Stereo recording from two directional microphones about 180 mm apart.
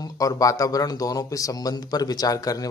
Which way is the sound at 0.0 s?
20° left (ahead or behind).